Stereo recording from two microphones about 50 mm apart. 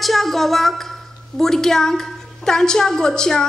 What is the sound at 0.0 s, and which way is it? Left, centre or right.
A woman's voice, centre.